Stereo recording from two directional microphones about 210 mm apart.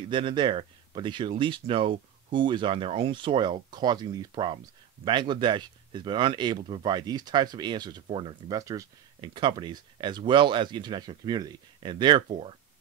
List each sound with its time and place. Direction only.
0.1 s speech: 20° right (ahead or behind)